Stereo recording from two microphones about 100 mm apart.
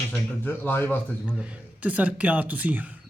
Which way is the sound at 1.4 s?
15° right (ahead or behind).